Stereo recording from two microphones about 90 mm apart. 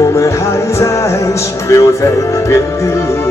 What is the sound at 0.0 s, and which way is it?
Music, 35° left (ahead or behind).